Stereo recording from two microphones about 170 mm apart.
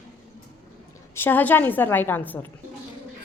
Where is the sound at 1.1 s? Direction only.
10° left (ahead or behind).